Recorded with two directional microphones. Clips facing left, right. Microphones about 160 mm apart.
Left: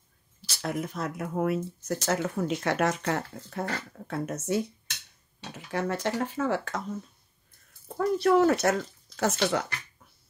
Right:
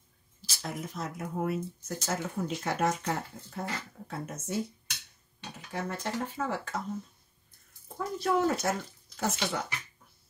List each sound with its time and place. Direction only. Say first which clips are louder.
0.5 s speech: left 6 dB; 65° left (ahead or behind)
5.7 s speech: left 6 dB; 80° left
8.0 s speech: left 6 dB; 70° left (ahead or behind)